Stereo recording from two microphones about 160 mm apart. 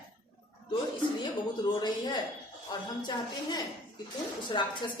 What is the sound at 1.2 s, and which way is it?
A woman's voice, 25° left (ahead or behind).